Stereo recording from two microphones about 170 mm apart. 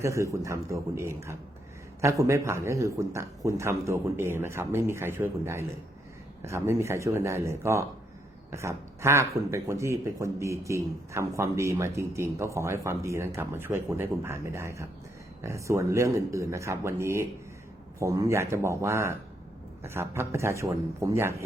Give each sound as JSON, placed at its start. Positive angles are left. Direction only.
{"t": 0.0, "sound": "a man's voice", "side_deg": -15}